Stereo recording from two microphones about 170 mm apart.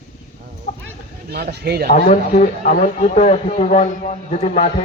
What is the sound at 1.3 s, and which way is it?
Speech, 70° right (ahead or behind).